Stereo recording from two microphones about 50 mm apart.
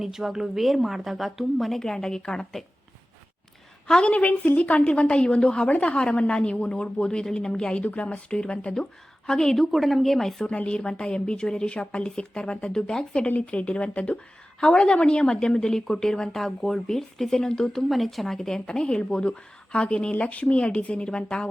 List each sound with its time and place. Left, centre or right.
0.0 s a woman's voice: centre
3.8 s a woman's voice: centre
9.7 s a woman's voice: centre
10.4 s a woman's voice: left
13.2 s a woman's voice: left